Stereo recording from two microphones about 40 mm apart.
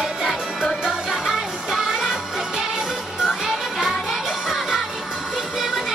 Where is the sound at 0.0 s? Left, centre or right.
Centre.